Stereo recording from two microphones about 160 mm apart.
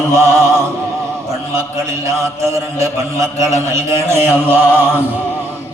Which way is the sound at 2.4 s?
20° right (ahead or behind).